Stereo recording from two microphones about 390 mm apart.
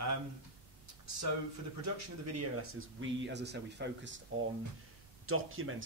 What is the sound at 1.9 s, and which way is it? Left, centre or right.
Speech, right.